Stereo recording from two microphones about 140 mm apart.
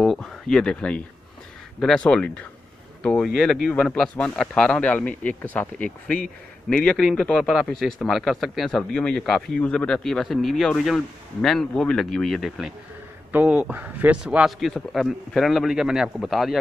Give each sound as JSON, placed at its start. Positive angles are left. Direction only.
{"t": 0.0, "sound": "speech", "side_deg": 0}